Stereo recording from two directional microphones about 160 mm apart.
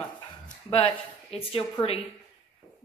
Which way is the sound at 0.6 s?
40° left (ahead or behind).